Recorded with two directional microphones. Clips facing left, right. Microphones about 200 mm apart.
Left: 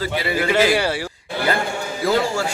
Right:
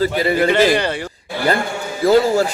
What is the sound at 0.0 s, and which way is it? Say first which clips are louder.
Speech: right 6 dB; 45° right (ahead or behind).